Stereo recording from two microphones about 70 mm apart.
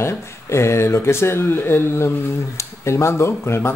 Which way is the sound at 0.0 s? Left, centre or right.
Left.